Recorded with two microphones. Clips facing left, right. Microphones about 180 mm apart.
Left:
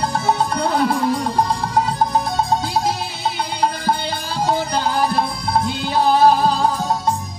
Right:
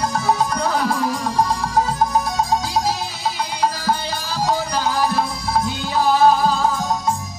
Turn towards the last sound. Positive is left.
turn(degrees=30)  # may be behind; listen again after turning